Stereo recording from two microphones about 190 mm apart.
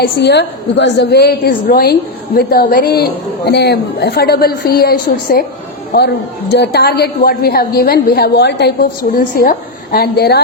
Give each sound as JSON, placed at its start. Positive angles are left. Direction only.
{"t": 0.0, "sound": "a woman's voice", "side_deg": 60}